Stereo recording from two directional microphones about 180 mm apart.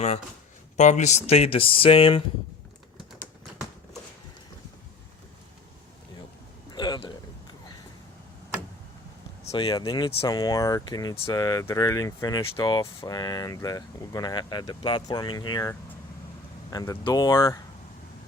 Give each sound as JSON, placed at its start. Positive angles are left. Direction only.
{"t": 0.8, "sound": "speech", "side_deg": 40}
{"t": 6.7, "sound": "a sound", "side_deg": 25}
{"t": 9.5, "sound": "speech", "side_deg": 30}
{"t": 16.7, "sound": "speech", "side_deg": 15}